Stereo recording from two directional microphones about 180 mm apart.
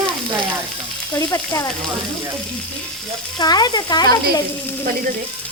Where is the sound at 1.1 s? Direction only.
25° left (ahead or behind).